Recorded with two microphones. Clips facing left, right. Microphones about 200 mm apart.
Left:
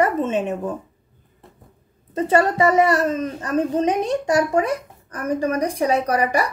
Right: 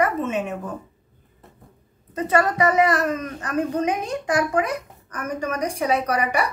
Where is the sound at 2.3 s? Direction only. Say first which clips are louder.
Left 3 dB; 30° left (ahead or behind).